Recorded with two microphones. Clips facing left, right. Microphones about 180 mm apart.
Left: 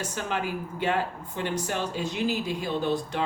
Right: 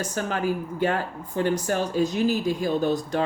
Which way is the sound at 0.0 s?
45° right (ahead or behind).